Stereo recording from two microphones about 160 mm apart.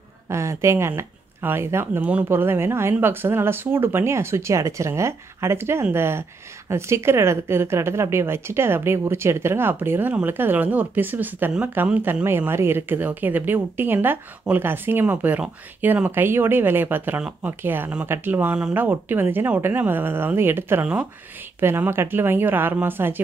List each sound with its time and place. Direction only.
0.3 s a woman's voice: 20° right (ahead or behind)